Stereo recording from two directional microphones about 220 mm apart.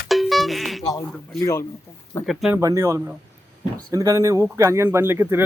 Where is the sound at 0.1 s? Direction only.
Centre (ahead or behind).